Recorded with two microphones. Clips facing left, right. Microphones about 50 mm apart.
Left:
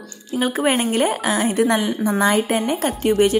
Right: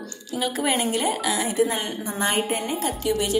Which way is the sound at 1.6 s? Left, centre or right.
Left.